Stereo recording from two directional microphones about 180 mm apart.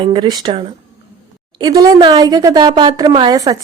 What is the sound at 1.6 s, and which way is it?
A woman's voice, 20° right (ahead or behind).